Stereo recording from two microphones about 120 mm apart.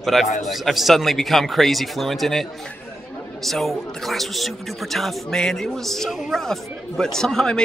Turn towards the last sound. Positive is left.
turn(degrees=5)  # may be behind; listen again after turning